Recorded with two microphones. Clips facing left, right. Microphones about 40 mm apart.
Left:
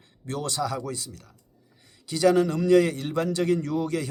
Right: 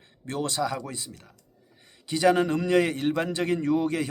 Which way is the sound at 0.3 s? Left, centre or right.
Right.